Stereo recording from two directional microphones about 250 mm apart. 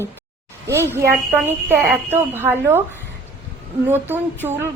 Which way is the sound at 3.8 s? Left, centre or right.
Centre.